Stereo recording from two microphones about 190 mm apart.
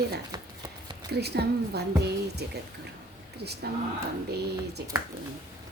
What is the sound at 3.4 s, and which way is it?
Speech, 60° right (ahead or behind).